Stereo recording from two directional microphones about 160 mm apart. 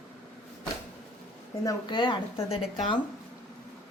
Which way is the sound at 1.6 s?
30° left (ahead or behind).